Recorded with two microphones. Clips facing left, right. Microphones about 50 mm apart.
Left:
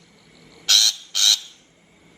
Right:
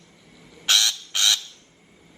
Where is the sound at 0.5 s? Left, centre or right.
Right.